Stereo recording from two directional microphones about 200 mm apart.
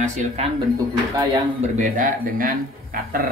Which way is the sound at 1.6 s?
40° right (ahead or behind).